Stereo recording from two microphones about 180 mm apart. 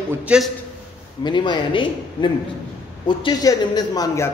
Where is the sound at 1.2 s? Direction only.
25° left (ahead or behind).